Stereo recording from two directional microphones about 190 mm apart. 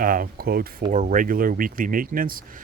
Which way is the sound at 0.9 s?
40° right (ahead or behind).